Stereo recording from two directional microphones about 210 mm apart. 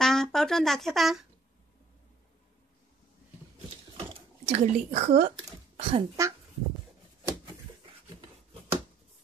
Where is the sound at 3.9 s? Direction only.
30° right (ahead or behind).